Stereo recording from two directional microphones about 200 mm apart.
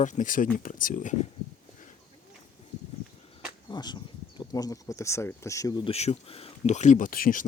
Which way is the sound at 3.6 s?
20° left (ahead or behind).